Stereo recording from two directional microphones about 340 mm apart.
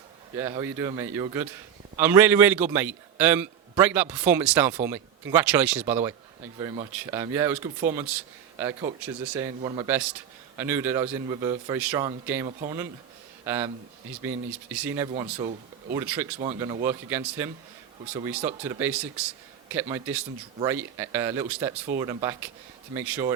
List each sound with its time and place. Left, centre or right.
0.3 s a man's voice: centre
16.0 s a man's voice: centre
16.5 s a man's voice: centre